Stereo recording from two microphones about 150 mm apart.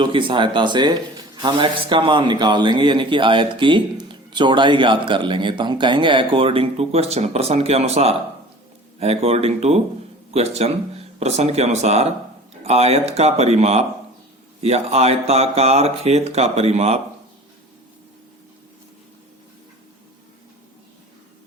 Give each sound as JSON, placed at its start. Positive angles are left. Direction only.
{"t": 0.0, "sound": "speech", "side_deg": -35}